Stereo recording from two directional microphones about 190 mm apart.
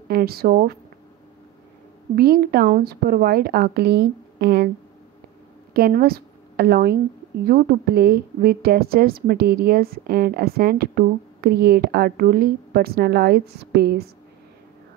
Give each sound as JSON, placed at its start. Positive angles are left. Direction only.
{"t": 0.1, "sound": "speech", "side_deg": -55}
{"t": 2.1, "sound": "a woman's voice", "side_deg": -55}
{"t": 5.7, "sound": "a woman's voice", "side_deg": -55}